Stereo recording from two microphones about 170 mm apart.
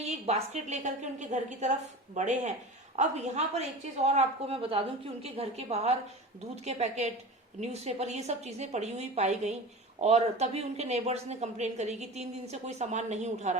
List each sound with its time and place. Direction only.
0.0 s a woman's voice: 40° right (ahead or behind)